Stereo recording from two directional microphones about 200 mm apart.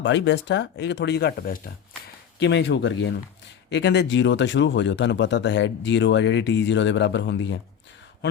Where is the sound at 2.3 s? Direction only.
60° left (ahead or behind).